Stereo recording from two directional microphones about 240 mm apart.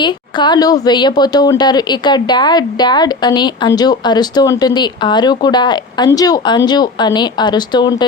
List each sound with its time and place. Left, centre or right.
0.0 s speech: centre